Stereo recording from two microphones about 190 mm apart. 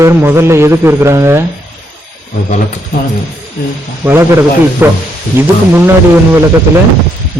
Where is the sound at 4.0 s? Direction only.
10° right (ahead or behind).